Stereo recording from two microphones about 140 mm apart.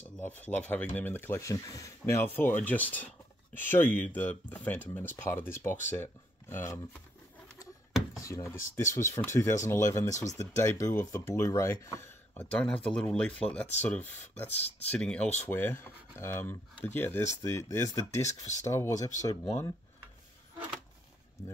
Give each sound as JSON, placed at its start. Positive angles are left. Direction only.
{"t": 0.4, "sound": "speech", "side_deg": 10}
{"t": 8.2, "sound": "speech", "side_deg": 20}
{"t": 14.5, "sound": "speech", "side_deg": 50}
{"t": 14.9, "sound": "speech", "side_deg": 10}